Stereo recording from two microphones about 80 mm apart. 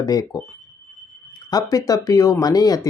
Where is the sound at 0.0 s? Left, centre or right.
Left.